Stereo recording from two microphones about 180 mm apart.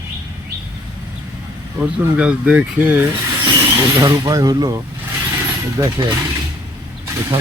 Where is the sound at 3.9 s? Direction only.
20° right (ahead or behind).